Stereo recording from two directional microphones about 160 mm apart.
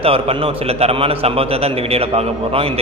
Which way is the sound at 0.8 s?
40° right (ahead or behind).